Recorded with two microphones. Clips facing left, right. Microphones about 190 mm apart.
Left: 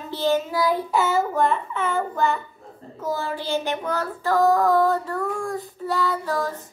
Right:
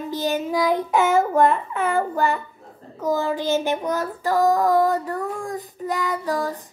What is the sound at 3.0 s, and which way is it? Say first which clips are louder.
Child singing: right 5 dB; 15° right (ahead or behind).